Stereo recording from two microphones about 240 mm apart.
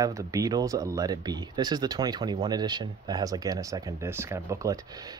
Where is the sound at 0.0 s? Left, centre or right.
Centre.